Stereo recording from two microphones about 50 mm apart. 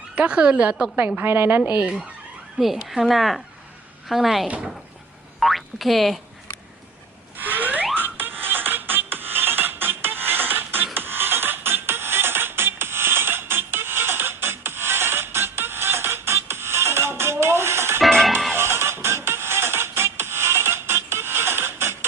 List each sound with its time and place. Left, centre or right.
0.2 s a woman's voice: right
0.9 s a woman's voice: right
1.2 s a woman's voice: right
2.6 s speech: centre
5.4 s boing: centre
7.3 s a sound: right
7.9 s music: right
18.1 s music: centre
18.5 s music: right